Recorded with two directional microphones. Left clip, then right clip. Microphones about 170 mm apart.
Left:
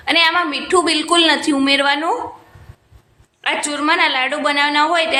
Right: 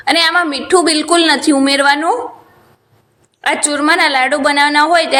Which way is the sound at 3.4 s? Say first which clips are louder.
Right 4 dB; 30° right (ahead or behind).